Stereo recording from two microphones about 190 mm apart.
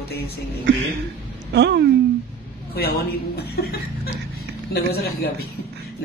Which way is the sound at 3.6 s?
55° left (ahead or behind).